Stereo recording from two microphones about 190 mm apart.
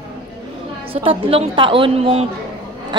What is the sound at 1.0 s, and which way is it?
A woman's voice, 30° right (ahead or behind).